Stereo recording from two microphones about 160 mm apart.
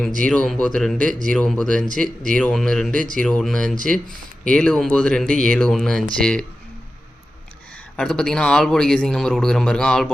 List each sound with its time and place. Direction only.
0.3 s a man's voice: 5° left (ahead or behind)
7.9 s a man's voice: 5° left (ahead or behind)